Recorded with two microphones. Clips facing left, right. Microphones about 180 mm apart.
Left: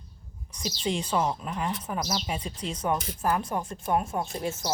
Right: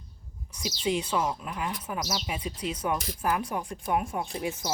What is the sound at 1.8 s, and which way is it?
Speech, 5° right (ahead or behind).